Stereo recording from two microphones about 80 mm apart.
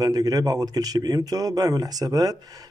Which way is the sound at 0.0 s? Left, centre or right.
Right.